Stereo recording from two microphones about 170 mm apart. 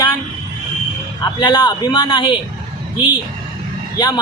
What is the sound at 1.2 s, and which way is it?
A man's voice, 25° left (ahead or behind).